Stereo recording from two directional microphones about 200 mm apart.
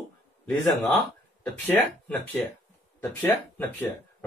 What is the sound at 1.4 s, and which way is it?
Speech, 5° left (ahead or behind).